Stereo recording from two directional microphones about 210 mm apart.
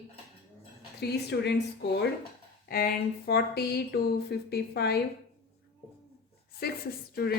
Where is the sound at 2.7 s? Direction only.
45° left (ahead or behind).